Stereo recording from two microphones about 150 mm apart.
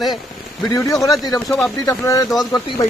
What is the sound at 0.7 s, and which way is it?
Speech, 20° left (ahead or behind).